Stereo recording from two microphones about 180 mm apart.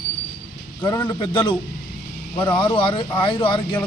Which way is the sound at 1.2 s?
25° left (ahead or behind).